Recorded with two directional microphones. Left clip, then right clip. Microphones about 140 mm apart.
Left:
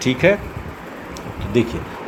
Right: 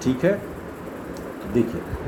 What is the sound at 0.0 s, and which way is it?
Speech, 30° left (ahead or behind).